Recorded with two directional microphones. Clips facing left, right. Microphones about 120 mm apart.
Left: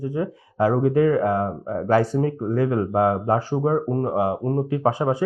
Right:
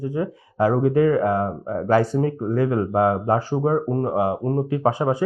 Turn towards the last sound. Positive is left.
turn(degrees=-25)  # may be behind; listen again after turning